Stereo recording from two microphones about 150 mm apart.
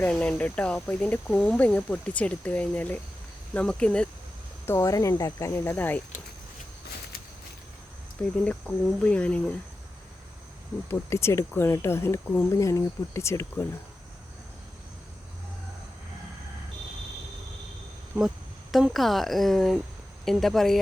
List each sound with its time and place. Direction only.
0.0 s speech: 10° left (ahead or behind)
4.6 s speech: 20° left (ahead or behind)
8.4 s speech: 10° left (ahead or behind)
10.8 s speech: 15° left (ahead or behind)
18.1 s a woman's voice: 10° right (ahead or behind)